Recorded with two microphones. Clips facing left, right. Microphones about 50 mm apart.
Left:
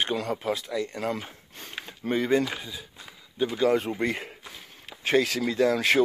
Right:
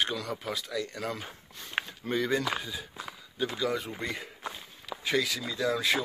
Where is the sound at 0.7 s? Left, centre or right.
Left.